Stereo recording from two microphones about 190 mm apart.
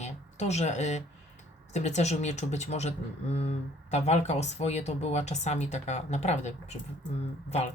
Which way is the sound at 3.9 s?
35° left (ahead or behind).